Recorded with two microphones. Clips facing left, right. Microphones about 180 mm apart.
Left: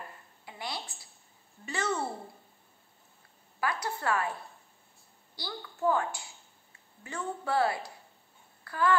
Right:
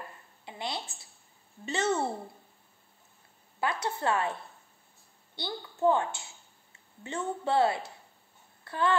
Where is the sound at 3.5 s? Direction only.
25° right (ahead or behind).